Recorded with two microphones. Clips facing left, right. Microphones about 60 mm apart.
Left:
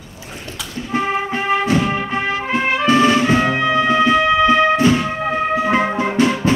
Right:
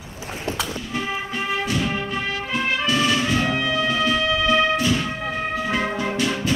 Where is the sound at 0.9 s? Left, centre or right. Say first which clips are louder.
Left 13 dB; left.